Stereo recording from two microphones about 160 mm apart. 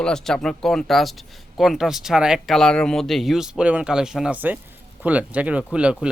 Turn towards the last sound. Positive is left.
turn(degrees=-5)  # may be behind; listen again after turning